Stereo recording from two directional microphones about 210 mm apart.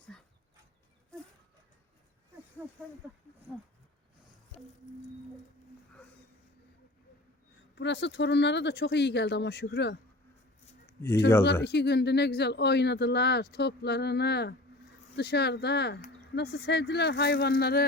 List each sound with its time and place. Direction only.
7.8 s speech: 55° left (ahead or behind)
11.6 s speech: 50° left (ahead or behind)